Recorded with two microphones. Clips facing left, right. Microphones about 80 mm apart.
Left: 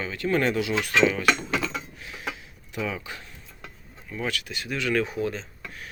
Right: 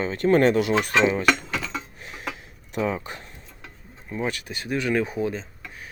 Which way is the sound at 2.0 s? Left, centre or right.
Right.